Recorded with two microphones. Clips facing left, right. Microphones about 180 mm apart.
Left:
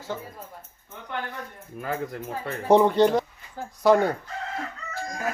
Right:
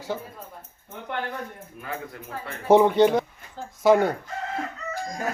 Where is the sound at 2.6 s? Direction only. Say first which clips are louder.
Right 1 dB; 5° right (ahead or behind).